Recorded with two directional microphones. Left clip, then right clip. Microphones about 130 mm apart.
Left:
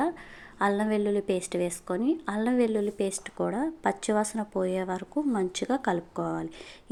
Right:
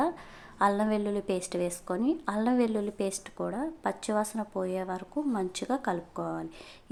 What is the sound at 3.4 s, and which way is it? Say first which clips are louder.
A woman's voice: left 4 dB; 30° left (ahead or behind).